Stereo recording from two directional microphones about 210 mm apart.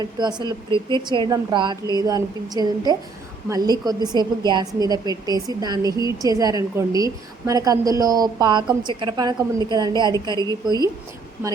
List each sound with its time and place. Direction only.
0.0 s a woman's voice: 20° right (ahead or behind)